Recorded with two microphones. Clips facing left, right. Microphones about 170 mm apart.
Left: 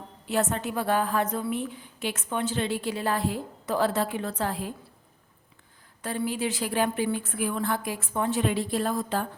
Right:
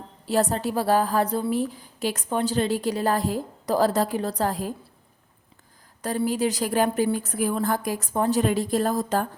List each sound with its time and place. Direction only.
0.3 s a woman's voice: 35° right (ahead or behind)
6.0 s a woman's voice: 40° right (ahead or behind)